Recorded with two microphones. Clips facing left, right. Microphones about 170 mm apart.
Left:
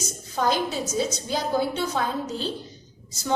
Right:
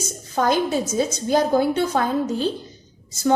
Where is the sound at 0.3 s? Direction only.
50° right (ahead or behind).